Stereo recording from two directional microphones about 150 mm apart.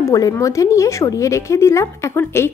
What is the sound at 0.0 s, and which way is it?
Speech, 20° left (ahead or behind).